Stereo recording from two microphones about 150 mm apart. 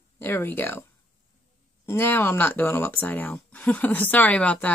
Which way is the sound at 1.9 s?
15° left (ahead or behind).